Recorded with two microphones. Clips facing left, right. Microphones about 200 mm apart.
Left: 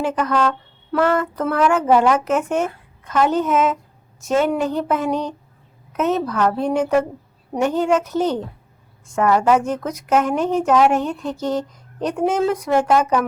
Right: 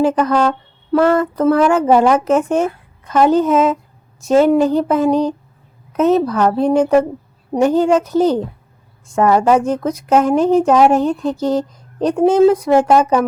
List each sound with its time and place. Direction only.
0.0 s speech: 35° right (ahead or behind)